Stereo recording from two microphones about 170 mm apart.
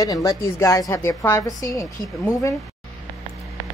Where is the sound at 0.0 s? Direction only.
20° left (ahead or behind).